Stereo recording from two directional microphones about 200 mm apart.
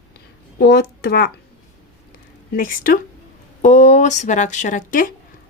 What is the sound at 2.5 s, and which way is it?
Speech, 45° left (ahead or behind).